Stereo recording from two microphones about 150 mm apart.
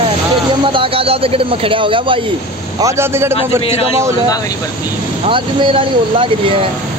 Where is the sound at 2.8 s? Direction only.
20° right (ahead or behind).